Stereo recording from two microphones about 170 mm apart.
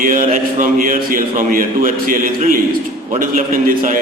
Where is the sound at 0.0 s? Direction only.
50° right (ahead or behind).